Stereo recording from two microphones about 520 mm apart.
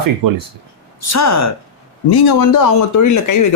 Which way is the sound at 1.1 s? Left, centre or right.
Left.